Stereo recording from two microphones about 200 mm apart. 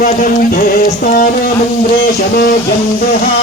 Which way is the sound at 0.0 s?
45° left (ahead or behind).